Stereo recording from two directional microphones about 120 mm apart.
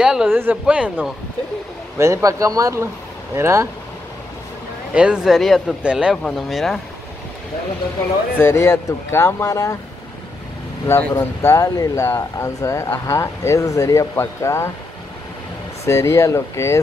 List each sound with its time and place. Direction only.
0.0 s speech: 5° right (ahead or behind)
2.0 s speech: 25° right (ahead or behind)
4.9 s speech: 10° right (ahead or behind)
6.2 s speech: centre (ahead or behind)
8.4 s speech: 20° left (ahead or behind)
10.9 s speech: 25° left (ahead or behind)
15.8 s speech: 25° left (ahead or behind)